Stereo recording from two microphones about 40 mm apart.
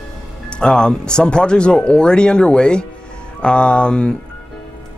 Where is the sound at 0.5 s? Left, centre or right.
Left.